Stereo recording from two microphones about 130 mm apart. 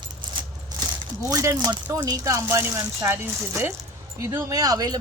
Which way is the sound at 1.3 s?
25° right (ahead or behind).